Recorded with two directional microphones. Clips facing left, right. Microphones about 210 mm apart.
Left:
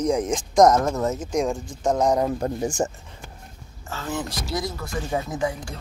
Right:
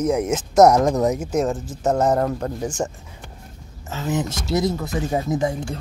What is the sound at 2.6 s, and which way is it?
Speech, 10° left (ahead or behind).